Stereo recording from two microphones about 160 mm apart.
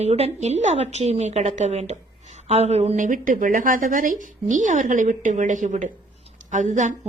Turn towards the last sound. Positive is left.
turn(degrees=-50)  # may be behind; listen again after turning